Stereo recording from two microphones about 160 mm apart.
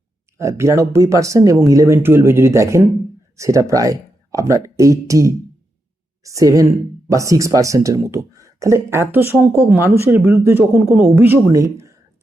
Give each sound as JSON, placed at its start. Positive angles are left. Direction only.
{"t": 0.3, "sound": "speech", "side_deg": -15}